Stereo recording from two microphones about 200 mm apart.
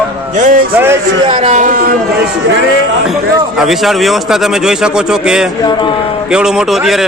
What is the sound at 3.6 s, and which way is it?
Speech, centre (ahead or behind).